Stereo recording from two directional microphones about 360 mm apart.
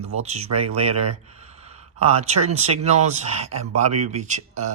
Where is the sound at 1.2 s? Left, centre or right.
Centre.